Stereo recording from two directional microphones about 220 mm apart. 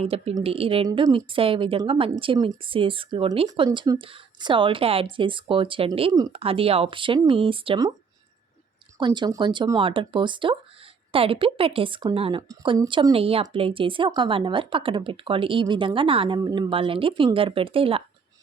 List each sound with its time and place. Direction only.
0.0 s a woman's voice: 25° right (ahead or behind)
9.0 s a woman's voice: 20° right (ahead or behind)